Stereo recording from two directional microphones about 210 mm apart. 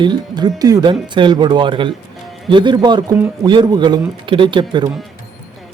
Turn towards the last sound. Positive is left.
turn(degrees=-20)  # may be behind; listen again after turning